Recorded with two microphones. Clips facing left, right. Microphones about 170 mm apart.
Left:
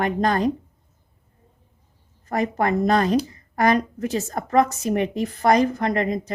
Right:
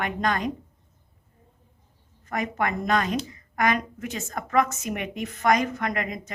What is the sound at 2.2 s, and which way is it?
A woman's voice, 35° left (ahead or behind).